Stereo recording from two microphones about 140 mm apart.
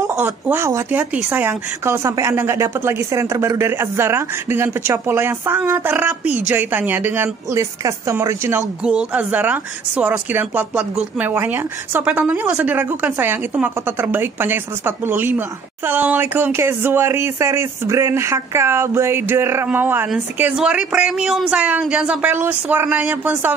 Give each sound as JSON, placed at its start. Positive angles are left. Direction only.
{"t": 0.0, "sound": "a woman's voice", "side_deg": -15}